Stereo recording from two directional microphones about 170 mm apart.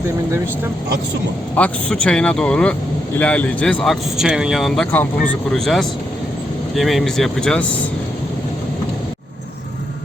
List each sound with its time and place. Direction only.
1.5 s speech: 5° left (ahead or behind)